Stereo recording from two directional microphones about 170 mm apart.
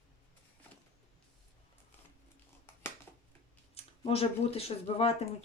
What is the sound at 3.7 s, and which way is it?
Speech, 35° left (ahead or behind).